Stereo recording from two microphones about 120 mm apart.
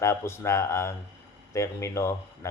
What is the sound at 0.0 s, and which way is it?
A man's voice, 20° left (ahead or behind).